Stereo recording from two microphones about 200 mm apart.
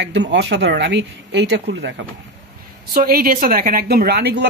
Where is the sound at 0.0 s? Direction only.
60° right (ahead or behind).